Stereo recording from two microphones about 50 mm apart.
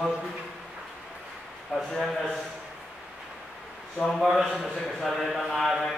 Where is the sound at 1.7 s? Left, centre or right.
Centre.